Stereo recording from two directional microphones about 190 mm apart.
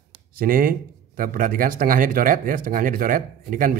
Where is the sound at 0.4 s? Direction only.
50° right (ahead or behind).